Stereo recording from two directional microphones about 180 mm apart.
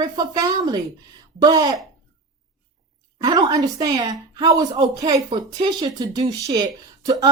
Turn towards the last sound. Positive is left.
turn(degrees=-20)  # may be behind; listen again after turning